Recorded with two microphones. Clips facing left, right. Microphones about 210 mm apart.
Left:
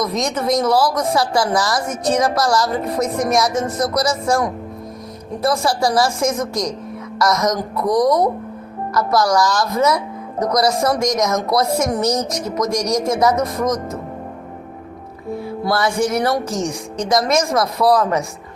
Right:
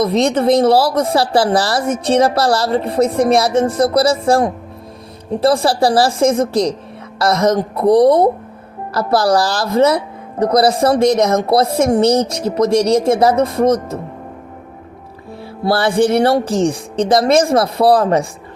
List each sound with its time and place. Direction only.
0.0 s a woman's voice: 30° right (ahead or behind)
15.4 s a woman's voice: 30° right (ahead or behind)